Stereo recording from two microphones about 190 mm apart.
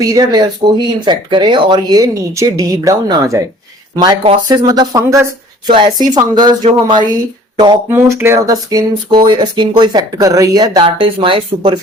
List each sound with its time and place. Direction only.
0.0 s speech: 20° right (ahead or behind)